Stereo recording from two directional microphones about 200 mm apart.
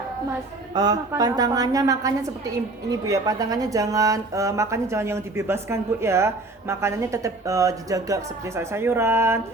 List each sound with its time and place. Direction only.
0.7 s a woman's voice: 20° right (ahead or behind)